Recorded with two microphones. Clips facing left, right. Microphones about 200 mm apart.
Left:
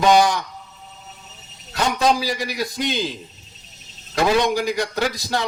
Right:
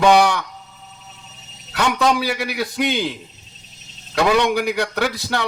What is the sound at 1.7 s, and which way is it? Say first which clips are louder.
A man's voice: right 1 dB; 65° right (ahead or behind).